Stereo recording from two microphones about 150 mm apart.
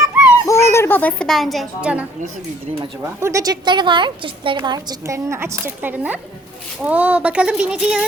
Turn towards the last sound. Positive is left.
turn(degrees=-5)  # may be behind; listen again after turning